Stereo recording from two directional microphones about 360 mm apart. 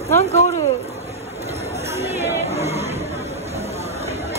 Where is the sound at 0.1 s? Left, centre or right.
Centre.